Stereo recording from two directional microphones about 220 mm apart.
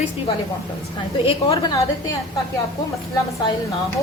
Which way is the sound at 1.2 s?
25° left (ahead or behind).